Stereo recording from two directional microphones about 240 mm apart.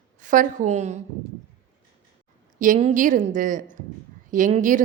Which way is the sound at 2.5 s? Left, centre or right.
Right.